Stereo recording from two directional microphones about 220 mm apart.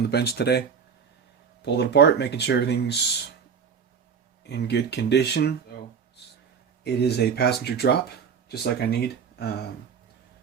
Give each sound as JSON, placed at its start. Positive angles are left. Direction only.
{"t": 0.1, "sound": "speech", "side_deg": 50}
{"t": 1.6, "sound": "speech", "side_deg": 50}
{"t": 4.4, "sound": "speech", "side_deg": 50}
{"t": 6.8, "sound": "speech", "side_deg": 50}